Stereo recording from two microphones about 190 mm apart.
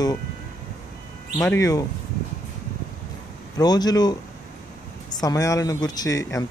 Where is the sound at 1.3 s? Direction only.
15° left (ahead or behind).